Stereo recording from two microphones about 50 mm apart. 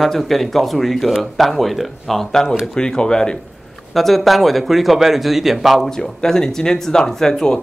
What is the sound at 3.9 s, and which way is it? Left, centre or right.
Speech, centre.